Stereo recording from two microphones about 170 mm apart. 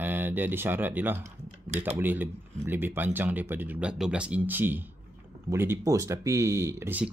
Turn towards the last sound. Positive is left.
turn(degrees=-15)  # may be behind; listen again after turning